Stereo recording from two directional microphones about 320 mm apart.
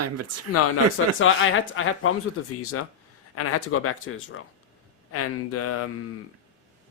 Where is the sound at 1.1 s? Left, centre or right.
Left.